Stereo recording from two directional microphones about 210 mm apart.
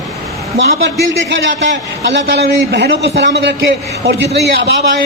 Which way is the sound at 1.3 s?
60° right (ahead or behind).